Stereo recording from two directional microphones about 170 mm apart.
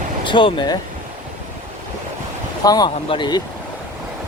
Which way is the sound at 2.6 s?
25° left (ahead or behind).